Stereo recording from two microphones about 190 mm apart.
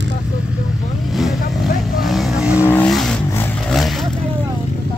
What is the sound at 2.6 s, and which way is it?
Vehicle, 5° left (ahead or behind).